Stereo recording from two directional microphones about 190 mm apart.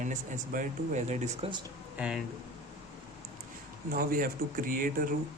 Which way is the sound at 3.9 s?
50° right (ahead or behind).